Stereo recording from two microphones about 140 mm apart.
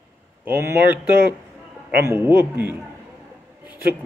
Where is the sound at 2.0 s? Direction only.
15° right (ahead or behind).